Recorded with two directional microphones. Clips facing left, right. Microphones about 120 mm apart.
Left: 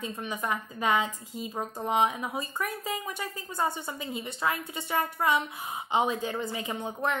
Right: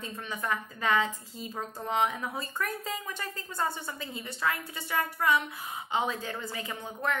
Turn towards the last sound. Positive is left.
turn(degrees=20)  # may be behind; listen again after turning